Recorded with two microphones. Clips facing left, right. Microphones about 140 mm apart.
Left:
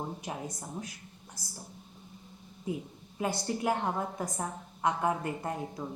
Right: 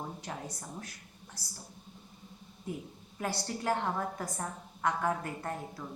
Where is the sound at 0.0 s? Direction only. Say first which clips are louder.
Left 3 dB; 15° left (ahead or behind).